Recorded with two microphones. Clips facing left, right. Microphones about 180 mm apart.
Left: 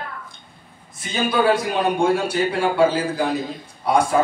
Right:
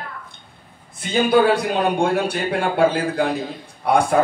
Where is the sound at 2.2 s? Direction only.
60° right (ahead or behind).